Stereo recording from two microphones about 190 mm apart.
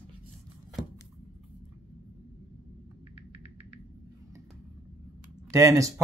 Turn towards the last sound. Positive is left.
turn(degrees=-15)  # may be behind; listen again after turning